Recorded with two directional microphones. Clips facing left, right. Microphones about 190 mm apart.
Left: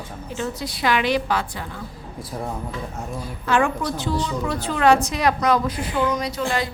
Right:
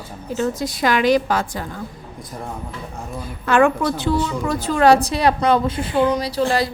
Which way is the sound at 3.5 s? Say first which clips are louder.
Right 5 dB; 60° right (ahead or behind).